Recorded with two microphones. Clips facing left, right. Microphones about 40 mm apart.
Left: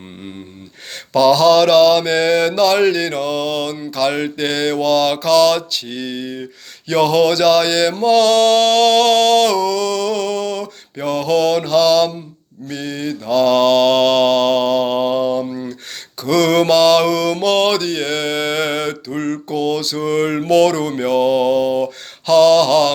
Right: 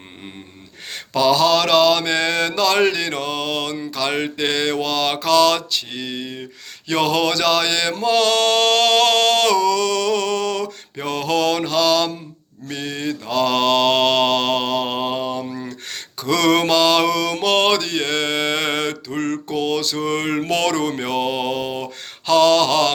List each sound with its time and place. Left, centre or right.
1.1 s mantra: right
6.8 s mantra: right
11.0 s mantra: right